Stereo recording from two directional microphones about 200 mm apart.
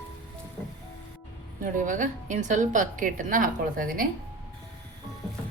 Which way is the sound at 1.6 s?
40° right (ahead or behind).